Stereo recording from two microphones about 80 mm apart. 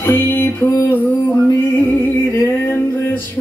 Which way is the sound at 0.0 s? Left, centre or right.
Left.